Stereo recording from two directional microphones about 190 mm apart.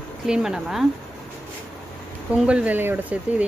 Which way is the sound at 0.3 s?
5° right (ahead or behind).